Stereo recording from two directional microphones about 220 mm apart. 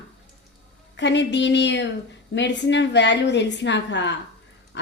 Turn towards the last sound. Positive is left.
turn(degrees=55)  # may be behind; listen again after turning